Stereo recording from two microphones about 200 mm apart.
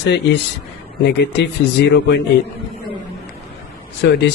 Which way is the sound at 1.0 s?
55° left (ahead or behind).